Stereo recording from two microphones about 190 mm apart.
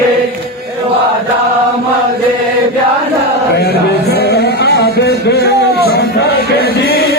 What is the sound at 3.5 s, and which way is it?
Music, 60° left (ahead or behind).